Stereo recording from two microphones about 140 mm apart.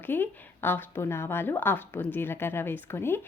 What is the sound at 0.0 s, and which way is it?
Speech, 15° left (ahead or behind).